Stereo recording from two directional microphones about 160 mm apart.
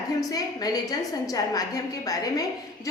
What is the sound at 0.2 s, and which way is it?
A woman's voice, 20° left (ahead or behind).